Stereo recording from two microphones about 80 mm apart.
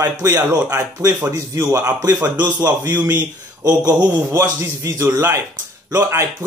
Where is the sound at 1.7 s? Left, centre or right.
Right.